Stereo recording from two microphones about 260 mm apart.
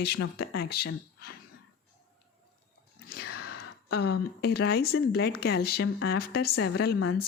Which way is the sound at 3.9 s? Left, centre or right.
Left.